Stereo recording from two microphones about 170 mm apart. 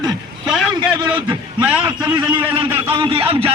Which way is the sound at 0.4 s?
Centre (ahead or behind).